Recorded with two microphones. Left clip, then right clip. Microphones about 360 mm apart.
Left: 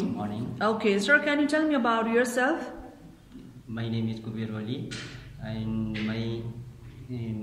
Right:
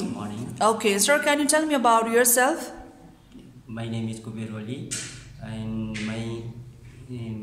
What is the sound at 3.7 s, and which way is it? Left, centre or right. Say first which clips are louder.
A man's voice: even; centre.